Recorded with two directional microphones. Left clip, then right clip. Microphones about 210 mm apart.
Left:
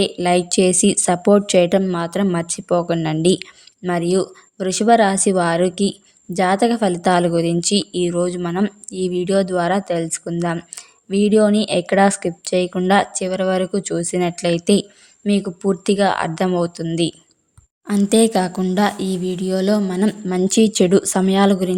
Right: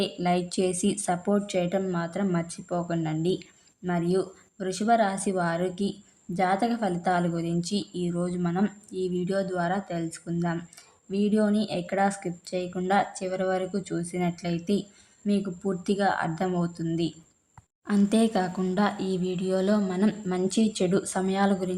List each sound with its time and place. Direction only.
0.0 s a woman's voice: 40° left (ahead or behind)
17.8 s speech: 25° left (ahead or behind)